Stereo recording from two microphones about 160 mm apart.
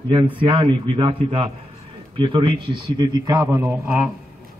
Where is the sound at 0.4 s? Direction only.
30° right (ahead or behind); by 4.0 s 10° right (ahead or behind).